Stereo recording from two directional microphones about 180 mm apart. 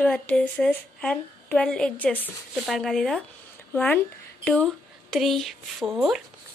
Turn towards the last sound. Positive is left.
turn(degrees=0)  # may be behind; listen again after turning